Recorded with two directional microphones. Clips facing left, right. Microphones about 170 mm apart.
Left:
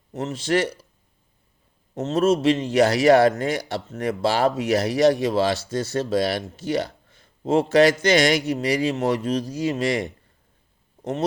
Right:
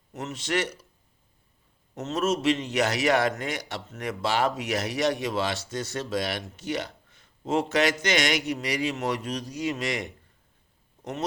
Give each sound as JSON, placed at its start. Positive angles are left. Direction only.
{"t": 0.1, "sound": "a man's voice", "side_deg": 30}
{"t": 2.0, "sound": "a man's voice", "side_deg": 30}